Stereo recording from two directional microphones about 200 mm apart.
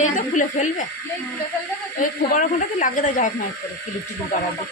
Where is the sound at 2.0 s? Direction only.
40° left (ahead or behind).